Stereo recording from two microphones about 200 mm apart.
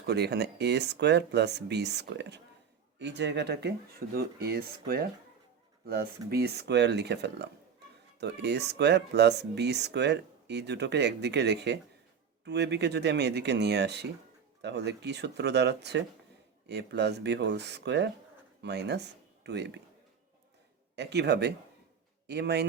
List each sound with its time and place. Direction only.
0.0 s speech: 55° right (ahead or behind)
5.8 s speech: 50° right (ahead or behind)
20.9 s speech: 60° right (ahead or behind)